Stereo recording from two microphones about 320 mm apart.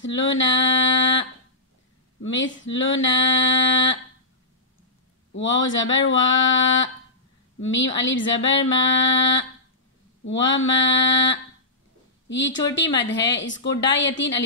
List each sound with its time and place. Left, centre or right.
0.0 s female singing: left
2.2 s female singing: left
5.3 s female singing: left